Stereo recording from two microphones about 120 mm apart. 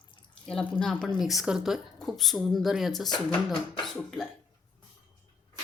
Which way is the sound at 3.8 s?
Centre (ahead or behind).